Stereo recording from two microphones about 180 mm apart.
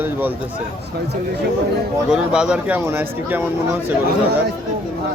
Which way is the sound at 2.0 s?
5° right (ahead or behind).